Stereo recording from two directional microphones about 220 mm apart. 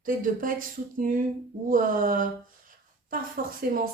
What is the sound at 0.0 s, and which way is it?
Speech, 40° right (ahead or behind).